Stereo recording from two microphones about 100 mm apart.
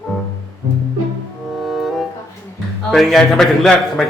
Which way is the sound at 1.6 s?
Centre (ahead or behind).